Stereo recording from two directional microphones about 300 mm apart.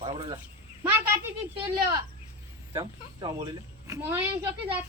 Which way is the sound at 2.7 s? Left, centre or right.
Centre.